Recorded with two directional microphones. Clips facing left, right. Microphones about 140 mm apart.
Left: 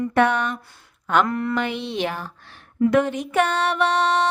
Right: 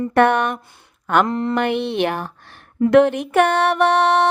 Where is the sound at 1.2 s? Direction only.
25° right (ahead or behind).